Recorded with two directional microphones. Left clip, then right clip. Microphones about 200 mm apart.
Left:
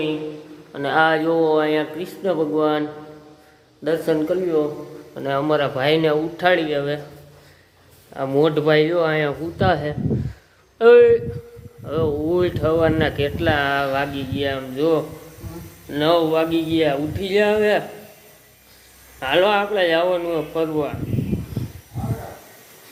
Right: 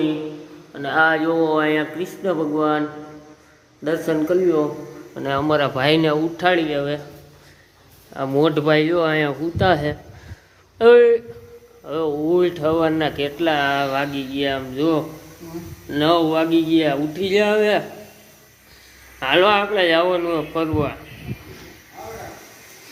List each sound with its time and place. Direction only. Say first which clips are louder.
0.7 s a man's voice: left 2 dB; 35° left (ahead or behind)
0.9 s speech: even; 20° left (ahead or behind)
1.5 s speech: left 1 dB; 5° right (ahead or behind)
3.8 s speech: even; centre (ahead or behind)
8.1 s a man's voice: even; 5° right (ahead or behind)
19.2 s speech: right 2 dB; centre (ahead or behind)